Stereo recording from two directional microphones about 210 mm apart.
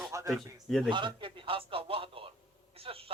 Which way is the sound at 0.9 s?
25° right (ahead or behind).